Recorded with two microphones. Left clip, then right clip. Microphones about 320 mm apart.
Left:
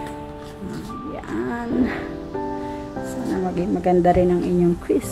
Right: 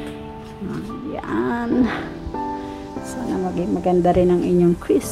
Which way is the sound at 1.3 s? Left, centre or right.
Centre.